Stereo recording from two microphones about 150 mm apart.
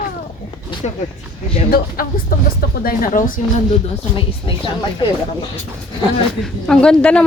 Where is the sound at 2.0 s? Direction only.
75° left (ahead or behind).